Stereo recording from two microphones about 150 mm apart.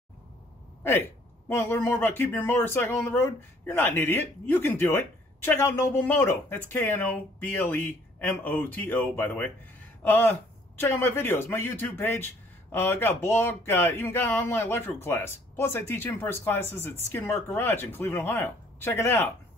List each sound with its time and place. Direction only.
0.8 s a man's voice: 15° left (ahead or behind)